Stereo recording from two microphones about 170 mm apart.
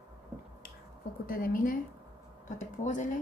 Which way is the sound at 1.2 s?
60° left (ahead or behind).